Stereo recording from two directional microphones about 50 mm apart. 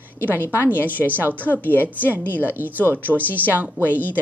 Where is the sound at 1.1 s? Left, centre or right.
Right.